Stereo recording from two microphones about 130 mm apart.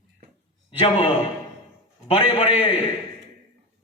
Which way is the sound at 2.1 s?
50° left (ahead or behind).